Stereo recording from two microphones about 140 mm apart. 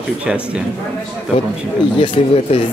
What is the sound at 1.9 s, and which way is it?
Speech, 40° left (ahead or behind).